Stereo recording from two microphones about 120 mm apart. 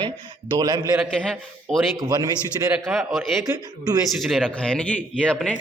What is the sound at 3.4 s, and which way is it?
Speech, 30° right (ahead or behind).